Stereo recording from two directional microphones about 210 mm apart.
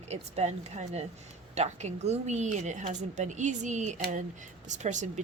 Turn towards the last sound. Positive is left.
turn(degrees=-35)  # may be behind; listen again after turning